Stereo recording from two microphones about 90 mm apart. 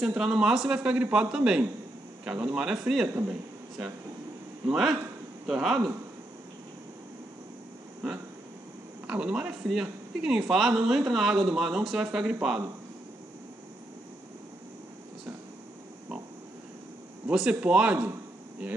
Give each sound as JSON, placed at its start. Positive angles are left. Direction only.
{"t": 0.0, "sound": "a man's voice", "side_deg": -5}
{"t": 4.6, "sound": "speech", "side_deg": -5}
{"t": 9.0, "sound": "speech", "side_deg": -15}
{"t": 17.3, "sound": "a man's voice", "side_deg": -10}